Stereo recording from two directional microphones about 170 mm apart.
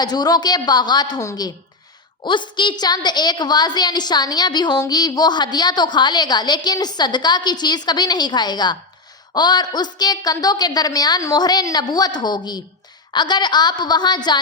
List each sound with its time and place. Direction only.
0.0 s a woman's voice: 25° left (ahead or behind)